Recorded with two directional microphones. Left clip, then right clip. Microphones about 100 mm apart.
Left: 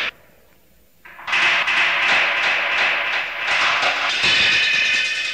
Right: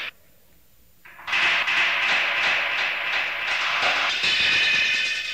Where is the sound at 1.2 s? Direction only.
30° right (ahead or behind).